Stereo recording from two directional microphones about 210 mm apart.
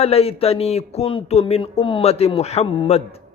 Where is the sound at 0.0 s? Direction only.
30° left (ahead or behind).